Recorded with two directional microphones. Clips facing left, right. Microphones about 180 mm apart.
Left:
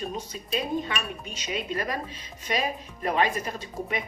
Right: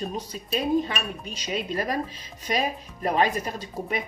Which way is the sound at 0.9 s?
35° right (ahead or behind).